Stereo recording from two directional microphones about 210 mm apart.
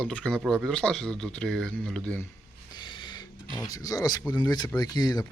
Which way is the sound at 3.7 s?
15° left (ahead or behind).